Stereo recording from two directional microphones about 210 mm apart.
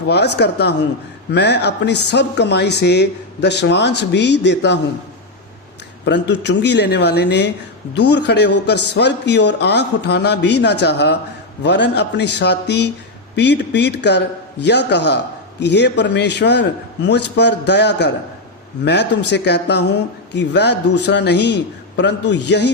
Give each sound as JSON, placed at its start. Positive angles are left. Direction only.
{"t": 0.3, "sound": "speech", "side_deg": 50}
{"t": 6.1, "sound": "speech", "side_deg": 55}
{"t": 19.3, "sound": "speech", "side_deg": 55}